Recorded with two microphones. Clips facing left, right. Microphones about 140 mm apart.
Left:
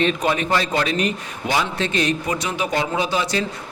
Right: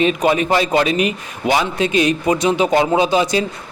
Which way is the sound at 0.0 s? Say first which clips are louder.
Right 5 dB; 10° right (ahead or behind).